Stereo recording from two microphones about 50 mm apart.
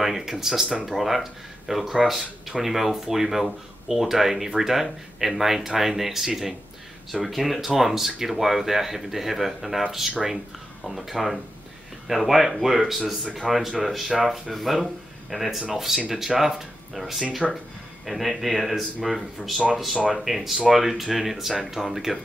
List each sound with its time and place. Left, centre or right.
0.0 s speech: centre